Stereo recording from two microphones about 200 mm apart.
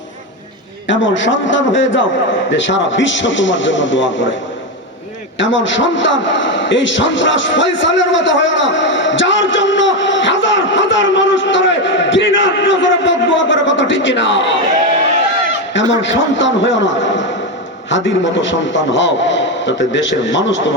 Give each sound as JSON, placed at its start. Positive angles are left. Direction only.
{"t": 0.9, "sound": "a man's voice", "side_deg": 65}
{"t": 5.4, "sound": "a man's voice", "side_deg": 65}
{"t": 16.0, "sound": "a man's voice", "side_deg": 65}